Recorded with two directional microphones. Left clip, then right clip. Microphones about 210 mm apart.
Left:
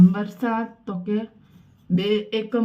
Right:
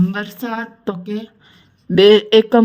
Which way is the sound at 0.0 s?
45° right (ahead or behind).